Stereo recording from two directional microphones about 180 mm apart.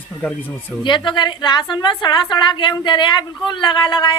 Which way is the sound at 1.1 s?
25° left (ahead or behind).